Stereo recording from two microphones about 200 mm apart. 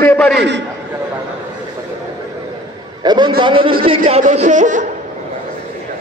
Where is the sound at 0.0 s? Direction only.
10° left (ahead or behind).